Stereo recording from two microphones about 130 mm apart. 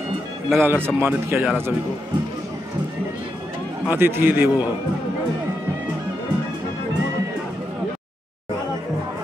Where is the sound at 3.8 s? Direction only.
15° right (ahead or behind).